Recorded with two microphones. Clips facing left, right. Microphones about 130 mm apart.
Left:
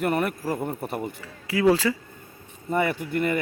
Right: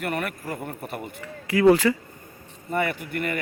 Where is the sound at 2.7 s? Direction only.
25° left (ahead or behind).